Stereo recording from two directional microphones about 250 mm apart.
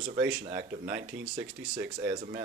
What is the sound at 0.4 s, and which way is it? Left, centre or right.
Speech, right.